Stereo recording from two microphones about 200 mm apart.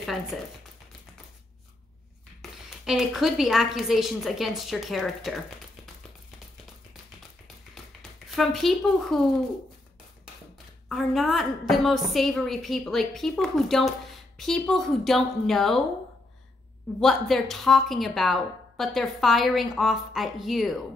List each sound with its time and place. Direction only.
0.0 s a woman's voice: centre (ahead or behind)
2.8 s a woman's voice: centre (ahead or behind)
8.3 s a woman's voice: centre (ahead or behind)
10.9 s a woman's voice: centre (ahead or behind)
17.0 s a woman's voice: centre (ahead or behind)